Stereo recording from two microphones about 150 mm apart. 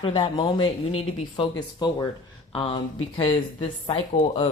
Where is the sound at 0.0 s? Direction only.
40° left (ahead or behind).